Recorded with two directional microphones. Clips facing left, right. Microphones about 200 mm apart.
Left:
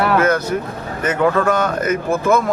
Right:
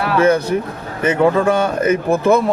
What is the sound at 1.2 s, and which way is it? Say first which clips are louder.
Speech: right 2 dB; 15° right (ahead or behind).